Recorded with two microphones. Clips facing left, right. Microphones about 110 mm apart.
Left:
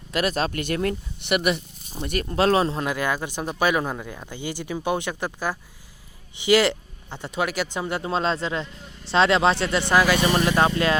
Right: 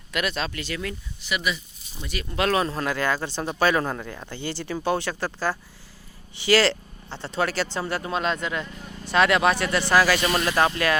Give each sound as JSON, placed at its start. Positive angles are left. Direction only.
{"t": 0.1, "sound": "speech", "side_deg": 35}
{"t": 2.3, "sound": "speech", "side_deg": 30}